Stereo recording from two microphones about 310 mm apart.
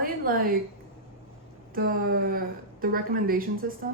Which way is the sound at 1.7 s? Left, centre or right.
Right.